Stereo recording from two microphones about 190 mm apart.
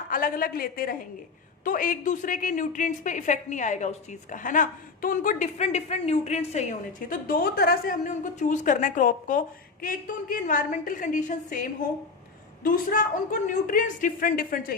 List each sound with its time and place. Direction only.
0.1 s a woman's voice: 50° left (ahead or behind)